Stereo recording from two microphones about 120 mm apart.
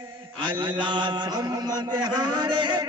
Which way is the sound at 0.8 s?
40° right (ahead or behind).